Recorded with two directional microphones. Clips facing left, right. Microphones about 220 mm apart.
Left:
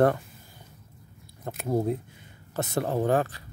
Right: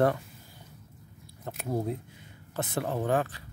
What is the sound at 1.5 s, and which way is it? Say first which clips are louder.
Speech: left 5 dB; 45° left (ahead or behind).